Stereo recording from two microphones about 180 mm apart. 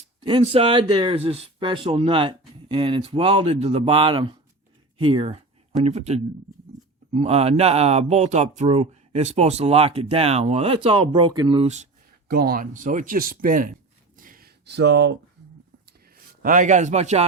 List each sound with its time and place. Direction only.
0.2 s speech: 30° right (ahead or behind)
12.3 s speech: 55° right (ahead or behind)
14.2 s a sound: 50° right (ahead or behind); by 15.2 s 70° right (ahead or behind)
16.4 s speech: 45° right (ahead or behind)